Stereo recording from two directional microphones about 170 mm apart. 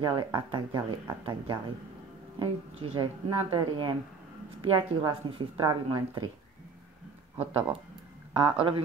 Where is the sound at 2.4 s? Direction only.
30° right (ahead or behind).